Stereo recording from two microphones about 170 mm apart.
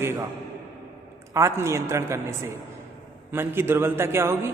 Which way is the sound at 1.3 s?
15° right (ahead or behind).